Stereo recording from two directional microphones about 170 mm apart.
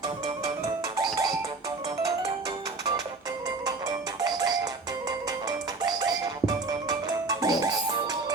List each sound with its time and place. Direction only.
0.9 s music: 25° right (ahead or behind)
4.4 s music: 25° right (ahead or behind)